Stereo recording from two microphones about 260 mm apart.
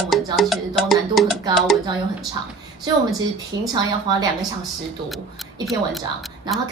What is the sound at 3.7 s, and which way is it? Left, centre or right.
Speech, centre.